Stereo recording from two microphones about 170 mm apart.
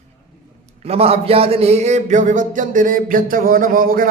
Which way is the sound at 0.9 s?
35° right (ahead or behind).